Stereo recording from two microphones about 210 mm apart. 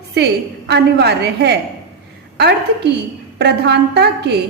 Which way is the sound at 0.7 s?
50° right (ahead or behind).